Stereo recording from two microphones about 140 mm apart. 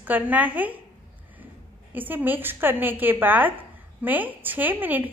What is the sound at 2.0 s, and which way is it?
A woman's voice, 15° right (ahead or behind).